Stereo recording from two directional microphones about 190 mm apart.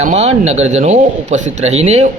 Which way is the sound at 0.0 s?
35° right (ahead or behind).